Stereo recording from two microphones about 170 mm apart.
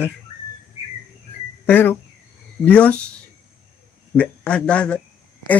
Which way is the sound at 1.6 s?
10° left (ahead or behind).